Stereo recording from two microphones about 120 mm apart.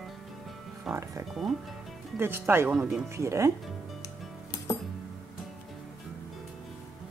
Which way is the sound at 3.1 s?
25° right (ahead or behind).